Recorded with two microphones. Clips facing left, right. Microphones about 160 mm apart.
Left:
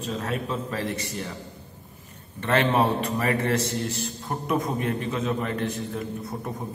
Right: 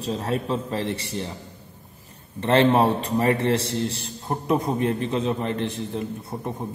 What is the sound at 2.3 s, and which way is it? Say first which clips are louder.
A man's voice: right 4 dB; 30° right (ahead or behind).